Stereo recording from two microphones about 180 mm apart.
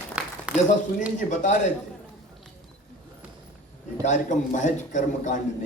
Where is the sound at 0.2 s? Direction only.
5° right (ahead or behind).